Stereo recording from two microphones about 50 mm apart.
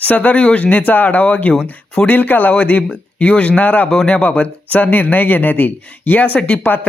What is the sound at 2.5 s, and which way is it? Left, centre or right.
Speech, left.